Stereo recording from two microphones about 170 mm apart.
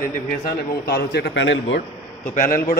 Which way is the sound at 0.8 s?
75° left (ahead or behind).